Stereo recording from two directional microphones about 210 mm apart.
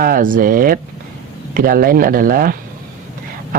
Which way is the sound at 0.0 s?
40° right (ahead or behind).